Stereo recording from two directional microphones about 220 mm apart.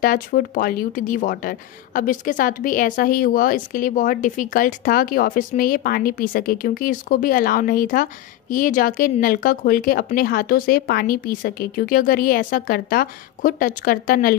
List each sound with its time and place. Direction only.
0.0 s speech: 40° left (ahead or behind)